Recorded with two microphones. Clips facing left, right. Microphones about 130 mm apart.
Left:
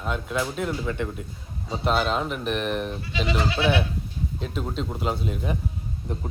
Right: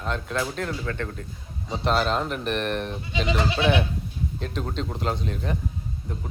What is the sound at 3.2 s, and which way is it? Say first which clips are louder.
Speech: even; 20° right (ahead or behind).